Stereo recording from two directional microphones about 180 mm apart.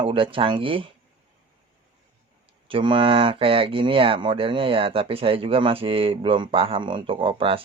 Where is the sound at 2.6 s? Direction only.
30° right (ahead or behind).